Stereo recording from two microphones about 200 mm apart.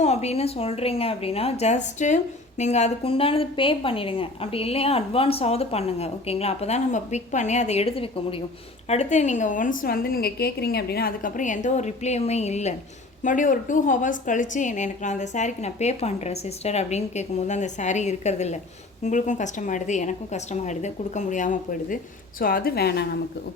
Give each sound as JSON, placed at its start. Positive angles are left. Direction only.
{"t": 0.0, "sound": "a woman's voice", "side_deg": 30}